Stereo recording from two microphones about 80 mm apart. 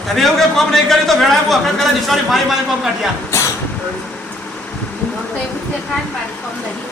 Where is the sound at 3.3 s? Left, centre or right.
Left.